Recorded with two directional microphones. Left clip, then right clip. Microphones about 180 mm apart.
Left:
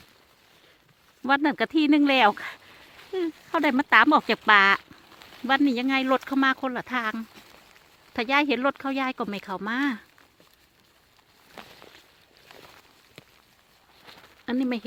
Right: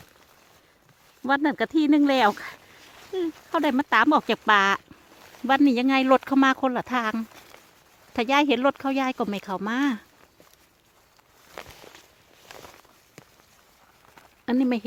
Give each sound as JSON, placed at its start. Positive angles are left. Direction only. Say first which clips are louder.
{"t": 1.2, "sound": "speech", "louder": "even", "side_deg": 0}
{"t": 14.4, "sound": "speech", "louder": "right 4 dB", "side_deg": -20}